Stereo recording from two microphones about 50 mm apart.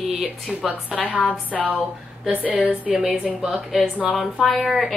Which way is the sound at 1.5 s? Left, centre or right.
Right.